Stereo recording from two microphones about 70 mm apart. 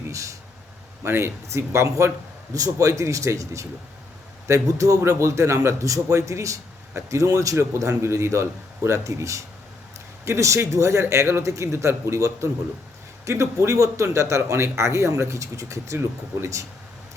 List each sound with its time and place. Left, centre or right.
0.1 s speech: right
1.0 s a man's voice: right